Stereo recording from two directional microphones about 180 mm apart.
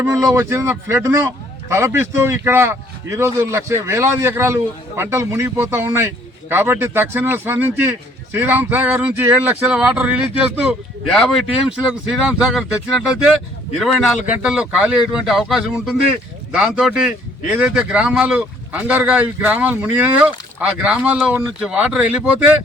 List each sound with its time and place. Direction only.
0.0 s speech: 15° right (ahead or behind)